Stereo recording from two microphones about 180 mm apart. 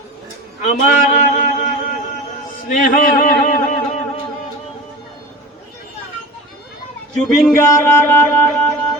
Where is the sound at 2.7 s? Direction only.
45° left (ahead or behind).